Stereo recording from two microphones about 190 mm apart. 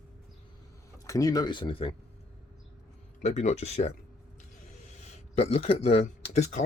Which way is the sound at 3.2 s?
35° left (ahead or behind).